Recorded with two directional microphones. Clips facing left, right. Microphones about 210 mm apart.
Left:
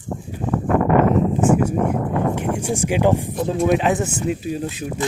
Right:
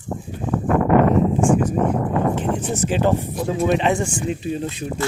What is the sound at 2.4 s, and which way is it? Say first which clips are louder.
Speech: even; 10° left (ahead or behind).